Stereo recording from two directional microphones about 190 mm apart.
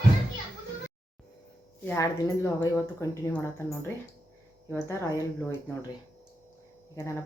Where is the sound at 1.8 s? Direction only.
15° left (ahead or behind).